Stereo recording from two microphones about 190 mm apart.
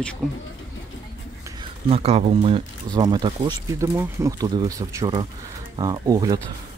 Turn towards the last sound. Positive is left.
turn(degrees=-20)  # may be behind; listen again after turning